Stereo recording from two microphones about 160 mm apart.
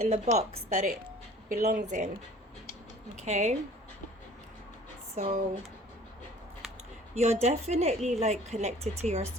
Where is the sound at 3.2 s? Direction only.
45° right (ahead or behind).